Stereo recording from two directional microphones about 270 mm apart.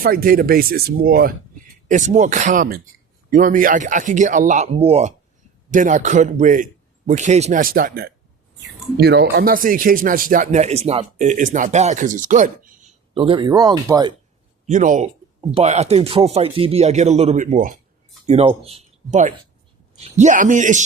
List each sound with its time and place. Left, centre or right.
0.0 s speech: right; by 14.1 s centre
14.7 s speech: right